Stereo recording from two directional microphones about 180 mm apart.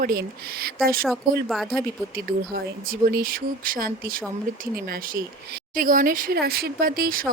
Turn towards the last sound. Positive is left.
turn(degrees=-55)  # may be behind; listen again after turning